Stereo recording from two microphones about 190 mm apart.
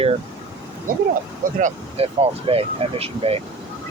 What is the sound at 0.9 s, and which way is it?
Speech, 50° right (ahead or behind).